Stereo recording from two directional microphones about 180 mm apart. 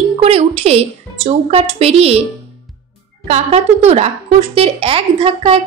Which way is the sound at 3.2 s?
35° right (ahead or behind).